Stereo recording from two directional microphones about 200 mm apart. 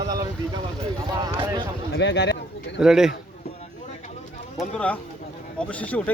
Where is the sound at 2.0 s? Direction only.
60° left (ahead or behind).